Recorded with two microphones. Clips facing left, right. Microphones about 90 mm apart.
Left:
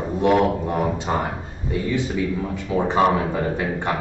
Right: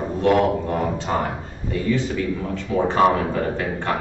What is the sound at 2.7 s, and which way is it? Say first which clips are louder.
A man's voice: right 1 dB; 5° left (ahead or behind).